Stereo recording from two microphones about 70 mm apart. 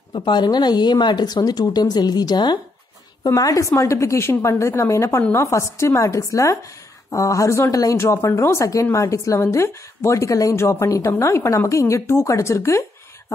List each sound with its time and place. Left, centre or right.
0.1 s speech: left
3.3 s a woman's voice: left